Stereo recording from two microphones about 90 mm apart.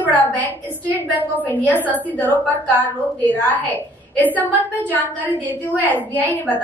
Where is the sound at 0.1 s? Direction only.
15° left (ahead or behind).